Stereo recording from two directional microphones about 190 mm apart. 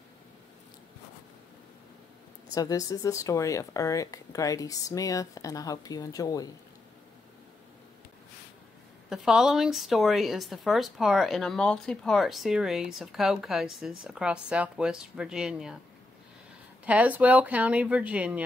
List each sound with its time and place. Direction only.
2.5 s speech: 20° left (ahead or behind)
9.1 s a woman's voice: 5° right (ahead or behind)
16.8 s speech: 5° right (ahead or behind)